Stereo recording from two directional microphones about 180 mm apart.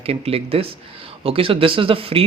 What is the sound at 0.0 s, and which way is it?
Speech, 35° right (ahead or behind).